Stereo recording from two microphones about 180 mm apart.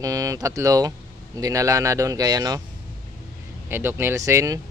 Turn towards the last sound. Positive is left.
turn(degrees=-15)  # may be behind; listen again after turning